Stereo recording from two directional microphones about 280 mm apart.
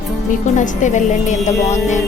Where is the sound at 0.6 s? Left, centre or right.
Left.